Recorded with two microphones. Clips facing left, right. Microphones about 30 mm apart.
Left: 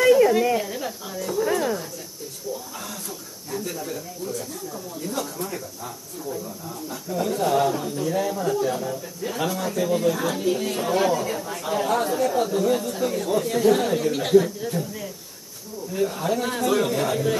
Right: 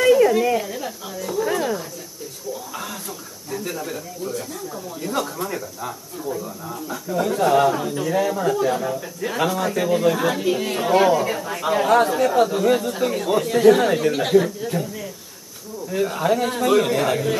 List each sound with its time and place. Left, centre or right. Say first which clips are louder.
0.0 s a sound: right 1 dB; centre
2.7 s a sound: right 4 dB; right
3.6 s speech: right 4 dB; right
5.1 s speech: right 5 dB; right
6.9 s speech: right 4 dB; right
7.3 s speech: right 5 dB; right
10.1 s speech: right 3 dB; right
14.1 s speech: right 1 dB; centre
15.9 s speech: right 4 dB; right